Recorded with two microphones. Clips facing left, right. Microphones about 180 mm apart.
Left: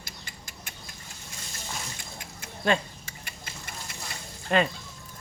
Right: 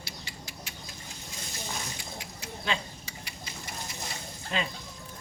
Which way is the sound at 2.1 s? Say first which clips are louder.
Right 2 dB; 50° left (ahead or behind).